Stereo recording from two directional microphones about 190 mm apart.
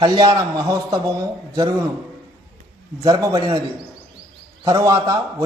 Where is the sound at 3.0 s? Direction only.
15° right (ahead or behind).